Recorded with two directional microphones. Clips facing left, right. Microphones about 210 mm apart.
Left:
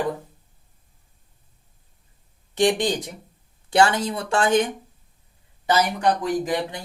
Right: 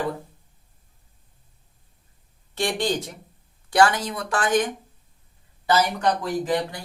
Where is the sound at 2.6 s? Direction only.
15° left (ahead or behind).